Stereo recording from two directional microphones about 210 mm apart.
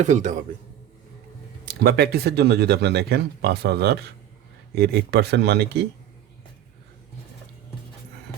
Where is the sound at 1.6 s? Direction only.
50° right (ahead or behind).